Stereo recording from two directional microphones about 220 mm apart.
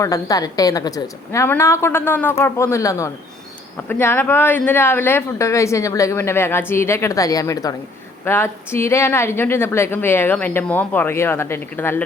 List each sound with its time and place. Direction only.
0.0 s speech: 15° left (ahead or behind)